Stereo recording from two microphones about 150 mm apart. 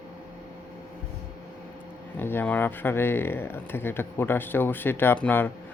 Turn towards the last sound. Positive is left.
turn(degrees=10)  # may be behind; listen again after turning